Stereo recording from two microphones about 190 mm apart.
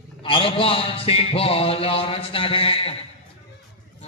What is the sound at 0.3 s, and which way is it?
A man's voice, 25° left (ahead or behind).